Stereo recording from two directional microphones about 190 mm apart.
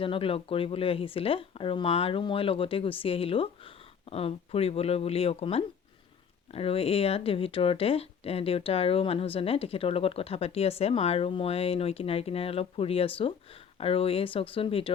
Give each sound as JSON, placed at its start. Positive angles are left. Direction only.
{"t": 0.0, "sound": "speech", "side_deg": 30}